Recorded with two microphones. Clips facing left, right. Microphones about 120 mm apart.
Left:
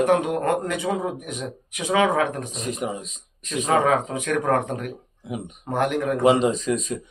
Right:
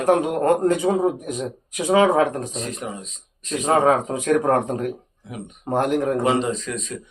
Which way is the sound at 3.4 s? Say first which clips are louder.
Right 2 dB; 30° right (ahead or behind).